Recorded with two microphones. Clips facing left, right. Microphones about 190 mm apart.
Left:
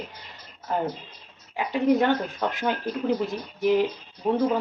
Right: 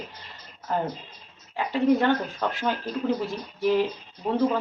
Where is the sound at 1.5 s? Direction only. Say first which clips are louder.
Even; 15° left (ahead or behind).